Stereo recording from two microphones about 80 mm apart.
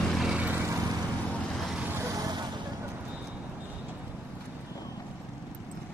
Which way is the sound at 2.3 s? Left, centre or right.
Right.